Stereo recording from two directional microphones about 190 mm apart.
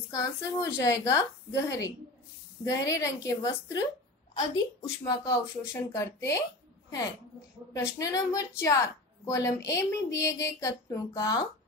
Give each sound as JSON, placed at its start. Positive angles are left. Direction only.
{"t": 0.1, "sound": "speech", "side_deg": 15}
{"t": 7.7, "sound": "speech", "side_deg": 20}